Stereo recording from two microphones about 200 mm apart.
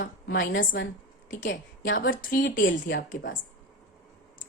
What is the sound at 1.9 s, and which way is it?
Speech, 45° left (ahead or behind).